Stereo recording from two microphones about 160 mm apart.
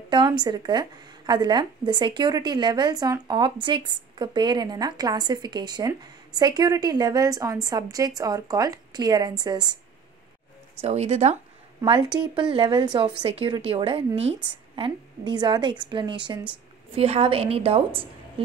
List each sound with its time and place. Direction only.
0.1 s speech: 30° right (ahead or behind)
10.8 s speech: 40° right (ahead or behind)
11.8 s a woman's voice: 30° right (ahead or behind)